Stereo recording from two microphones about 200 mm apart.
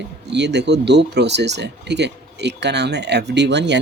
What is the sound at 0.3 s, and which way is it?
Speech, 60° right (ahead or behind).